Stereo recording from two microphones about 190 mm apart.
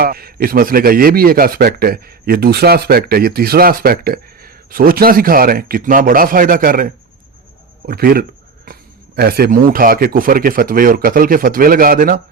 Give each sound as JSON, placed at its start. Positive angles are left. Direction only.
{"t": 0.0, "sound": "speech", "side_deg": -50}